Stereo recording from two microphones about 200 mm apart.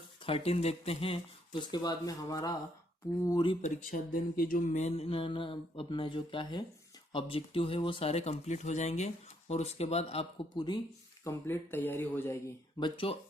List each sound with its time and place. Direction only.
0.3 s speech: 30° left (ahead or behind)
3.6 s speech: 40° left (ahead or behind); by 12.5 s 10° left (ahead or behind)
12.8 s speech: 25° left (ahead or behind)